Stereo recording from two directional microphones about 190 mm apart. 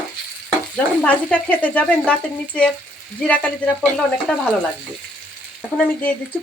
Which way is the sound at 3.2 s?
5° left (ahead or behind).